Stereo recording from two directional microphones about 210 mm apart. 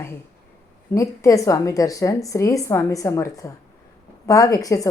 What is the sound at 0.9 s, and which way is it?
A woman's voice, 15° left (ahead or behind).